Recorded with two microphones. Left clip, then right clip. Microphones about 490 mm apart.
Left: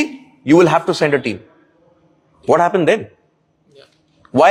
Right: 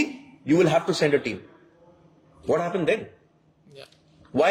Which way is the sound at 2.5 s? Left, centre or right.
Left.